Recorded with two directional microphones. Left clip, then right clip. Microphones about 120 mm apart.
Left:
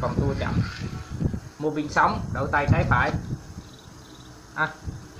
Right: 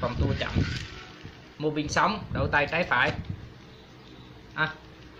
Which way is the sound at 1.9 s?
15° right (ahead or behind).